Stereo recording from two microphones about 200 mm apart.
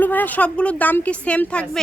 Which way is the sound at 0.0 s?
10° left (ahead or behind).